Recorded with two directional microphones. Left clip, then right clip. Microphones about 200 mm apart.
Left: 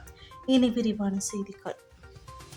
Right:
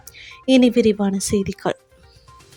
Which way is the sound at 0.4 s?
35° right (ahead or behind).